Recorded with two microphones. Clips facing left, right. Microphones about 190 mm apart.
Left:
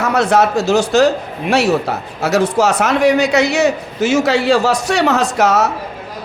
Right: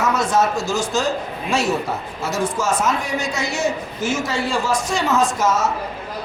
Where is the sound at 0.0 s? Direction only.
65° left (ahead or behind).